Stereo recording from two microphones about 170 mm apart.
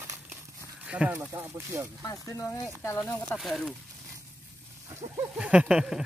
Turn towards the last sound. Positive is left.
turn(degrees=-5)  # may be behind; listen again after turning